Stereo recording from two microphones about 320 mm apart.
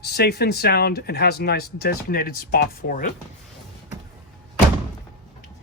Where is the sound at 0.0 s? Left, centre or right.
Left.